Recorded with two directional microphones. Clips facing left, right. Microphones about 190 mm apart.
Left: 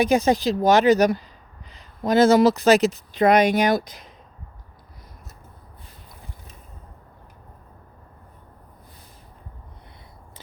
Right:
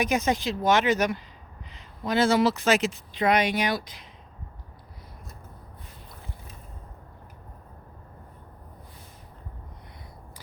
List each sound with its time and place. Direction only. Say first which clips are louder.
0.0 s speech: left 6 dB; 35° left (ahead or behind)